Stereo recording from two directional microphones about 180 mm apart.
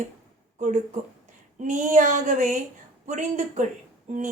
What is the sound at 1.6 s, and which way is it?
Speech, 45° right (ahead or behind).